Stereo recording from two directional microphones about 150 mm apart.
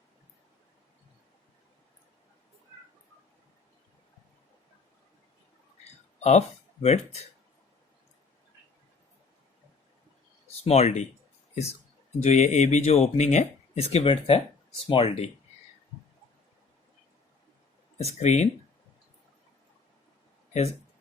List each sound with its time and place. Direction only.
6.1 s speech: 50° left (ahead or behind)
10.6 s speech: 45° left (ahead or behind)
12.2 s speech: 45° left (ahead or behind)
17.9 s speech: 50° left (ahead or behind)